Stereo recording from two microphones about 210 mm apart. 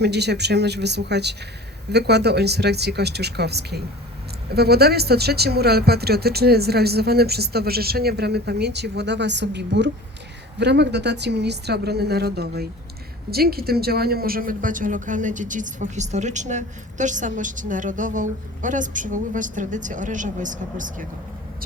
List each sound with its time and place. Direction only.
0.0 s speech: 55° right (ahead or behind)